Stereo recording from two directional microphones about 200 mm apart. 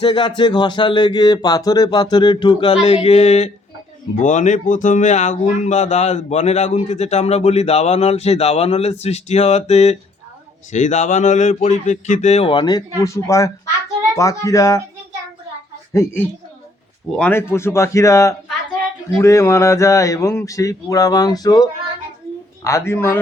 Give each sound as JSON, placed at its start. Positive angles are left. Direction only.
{"t": 0.0, "sound": "speech", "side_deg": 25}
{"t": 15.9, "sound": "speech", "side_deg": 15}